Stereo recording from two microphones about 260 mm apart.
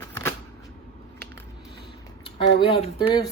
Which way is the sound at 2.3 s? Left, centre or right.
Centre.